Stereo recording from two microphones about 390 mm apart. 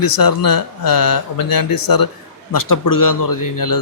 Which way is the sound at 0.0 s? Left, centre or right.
Left.